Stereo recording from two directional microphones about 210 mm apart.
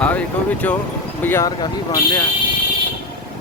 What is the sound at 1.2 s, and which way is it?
Speech, 10° left (ahead or behind).